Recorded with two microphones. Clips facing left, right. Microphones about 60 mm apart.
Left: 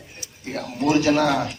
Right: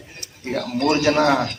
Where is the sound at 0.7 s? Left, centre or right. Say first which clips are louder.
Even; right.